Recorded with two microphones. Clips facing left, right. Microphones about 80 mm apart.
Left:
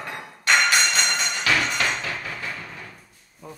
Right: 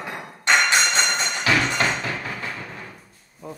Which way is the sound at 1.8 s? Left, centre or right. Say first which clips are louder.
Right 2 dB; right.